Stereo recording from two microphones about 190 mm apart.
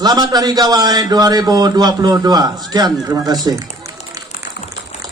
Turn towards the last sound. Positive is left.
turn(degrees=-20)  # may be behind; listen again after turning